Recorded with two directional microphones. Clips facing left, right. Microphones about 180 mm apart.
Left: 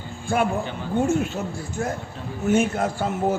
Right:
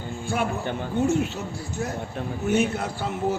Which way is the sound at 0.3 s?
55° left (ahead or behind).